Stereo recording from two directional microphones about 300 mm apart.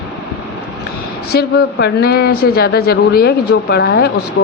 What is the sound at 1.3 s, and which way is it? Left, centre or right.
Speech, left.